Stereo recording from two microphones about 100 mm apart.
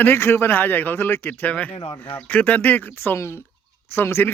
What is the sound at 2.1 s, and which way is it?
Speech, 15° left (ahead or behind).